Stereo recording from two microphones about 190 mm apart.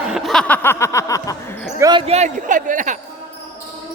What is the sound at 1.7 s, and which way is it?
Speech, 20° right (ahead or behind).